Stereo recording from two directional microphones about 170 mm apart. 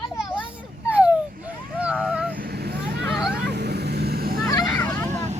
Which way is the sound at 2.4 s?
70° right (ahead or behind).